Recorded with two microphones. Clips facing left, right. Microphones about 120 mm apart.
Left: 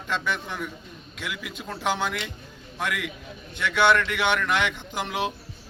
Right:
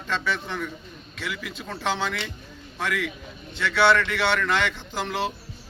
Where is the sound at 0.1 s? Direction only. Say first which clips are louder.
Right 1 dB; 10° left (ahead or behind).